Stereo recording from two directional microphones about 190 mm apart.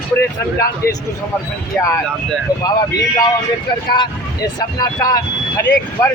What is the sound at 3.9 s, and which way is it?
Speech, 20° left (ahead or behind).